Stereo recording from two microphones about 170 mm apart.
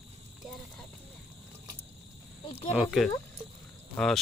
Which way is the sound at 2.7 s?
Centre (ahead or behind).